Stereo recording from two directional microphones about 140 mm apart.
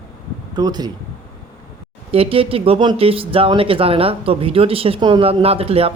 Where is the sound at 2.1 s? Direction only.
40° right (ahead or behind).